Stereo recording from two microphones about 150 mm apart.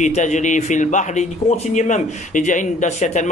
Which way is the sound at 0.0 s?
55° left (ahead or behind).